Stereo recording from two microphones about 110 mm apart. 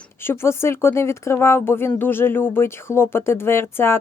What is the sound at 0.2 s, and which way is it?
Speech, 20° left (ahead or behind).